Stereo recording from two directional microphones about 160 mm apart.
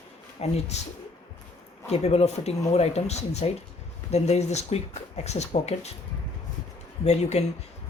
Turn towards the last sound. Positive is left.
turn(degrees=45)  # may be behind; listen again after turning